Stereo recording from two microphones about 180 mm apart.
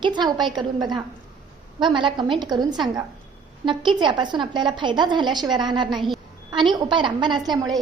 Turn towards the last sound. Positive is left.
turn(degrees=-20)  # may be behind; listen again after turning